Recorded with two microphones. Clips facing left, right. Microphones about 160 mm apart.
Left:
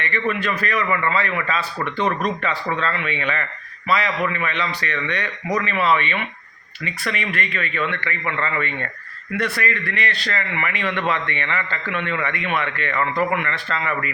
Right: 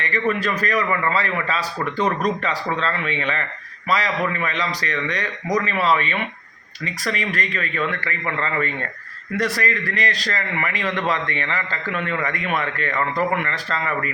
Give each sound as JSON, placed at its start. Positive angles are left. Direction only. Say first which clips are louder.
{"t": 0.0, "sound": "a man's voice", "louder": "right 1 dB", "side_deg": -40}